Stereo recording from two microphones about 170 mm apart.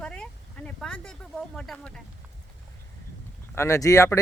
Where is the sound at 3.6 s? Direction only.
20° left (ahead or behind).